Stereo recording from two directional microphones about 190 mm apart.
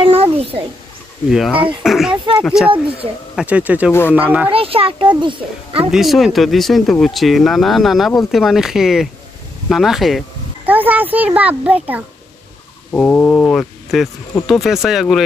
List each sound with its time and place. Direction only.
0.0 s a sound: 30° right (ahead or behind)
1.3 s speech: 5° right (ahead or behind)
4.5 s a child's voice: 30° right (ahead or behind)
5.9 s speech: centre (ahead or behind)
12.9 s speech: 10° left (ahead or behind)